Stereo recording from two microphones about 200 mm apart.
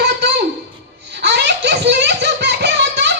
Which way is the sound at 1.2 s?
60° right (ahead or behind).